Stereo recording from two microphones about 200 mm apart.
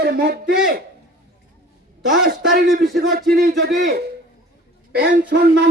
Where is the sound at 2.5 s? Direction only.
50° right (ahead or behind).